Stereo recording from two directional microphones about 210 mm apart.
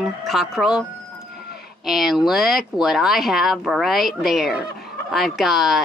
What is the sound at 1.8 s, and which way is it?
Speech, centre (ahead or behind).